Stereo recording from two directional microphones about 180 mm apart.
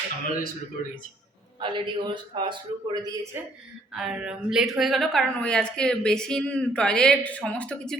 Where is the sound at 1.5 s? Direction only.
25° right (ahead or behind).